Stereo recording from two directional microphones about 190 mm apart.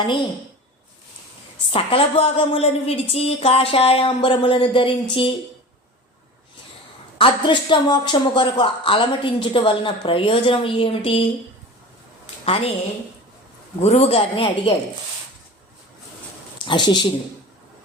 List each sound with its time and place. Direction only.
1.7 s a woman's voice: 30° left (ahead or behind)
7.2 s a woman's voice: 25° left (ahead or behind)
12.2 s a sound: 30° left (ahead or behind)
13.8 s a woman's voice: 35° left (ahead or behind)
16.6 s a woman's voice: 25° left (ahead or behind)